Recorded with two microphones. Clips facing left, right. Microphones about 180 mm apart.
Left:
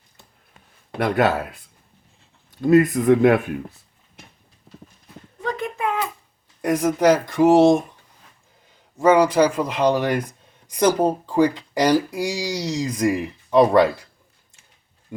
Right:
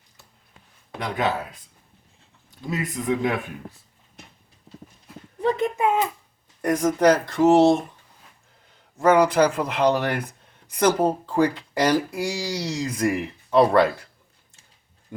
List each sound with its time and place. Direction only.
0.9 s speech: 65° left (ahead or behind)
2.6 s speech: 60° left (ahead or behind)
5.4 s a sound: 25° right (ahead or behind)
6.6 s speech: 15° left (ahead or behind)
9.0 s speech: 10° left (ahead or behind)